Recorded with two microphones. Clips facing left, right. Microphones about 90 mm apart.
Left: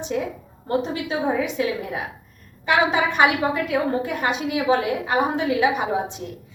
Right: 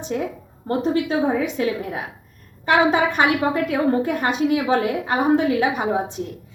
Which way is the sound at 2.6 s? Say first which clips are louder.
Right 3 dB; 45° right (ahead or behind).